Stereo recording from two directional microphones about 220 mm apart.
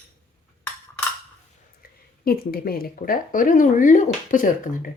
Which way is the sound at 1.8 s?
45° left (ahead or behind).